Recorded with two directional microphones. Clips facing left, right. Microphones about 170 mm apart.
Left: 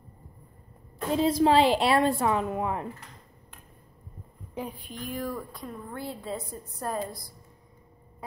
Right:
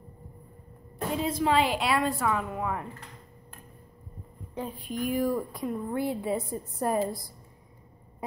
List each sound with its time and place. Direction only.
1.1 s a woman's voice: 35° left (ahead or behind)
4.8 s a woman's voice: 10° right (ahead or behind)
8.2 s a sound: 15° right (ahead or behind)